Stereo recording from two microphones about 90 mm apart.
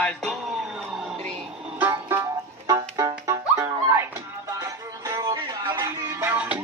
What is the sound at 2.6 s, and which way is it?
Music, 45° right (ahead or behind).